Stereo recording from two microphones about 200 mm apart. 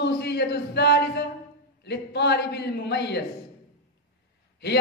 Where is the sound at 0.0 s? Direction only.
55° left (ahead or behind).